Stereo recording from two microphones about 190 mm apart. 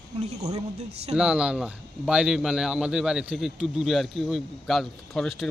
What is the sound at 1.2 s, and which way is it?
Speech, 5° right (ahead or behind).